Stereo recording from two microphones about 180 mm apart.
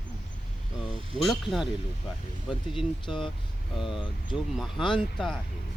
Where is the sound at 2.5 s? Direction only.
30° left (ahead or behind).